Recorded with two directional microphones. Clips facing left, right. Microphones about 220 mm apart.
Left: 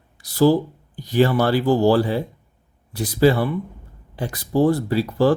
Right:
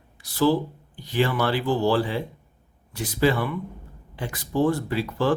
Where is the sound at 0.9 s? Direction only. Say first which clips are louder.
Left 6 dB; 40° left (ahead or behind).